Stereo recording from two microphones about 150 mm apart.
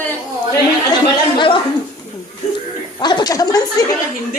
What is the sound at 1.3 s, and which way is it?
Speech, 35° left (ahead or behind).